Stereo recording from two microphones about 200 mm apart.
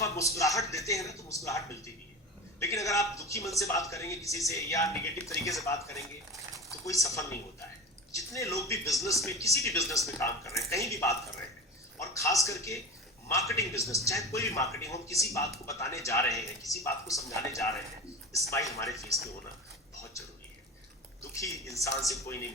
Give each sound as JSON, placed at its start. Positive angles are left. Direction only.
{"t": 0.0, "sound": "speech", "side_deg": 15}
{"t": 21.2, "sound": "speech", "side_deg": 15}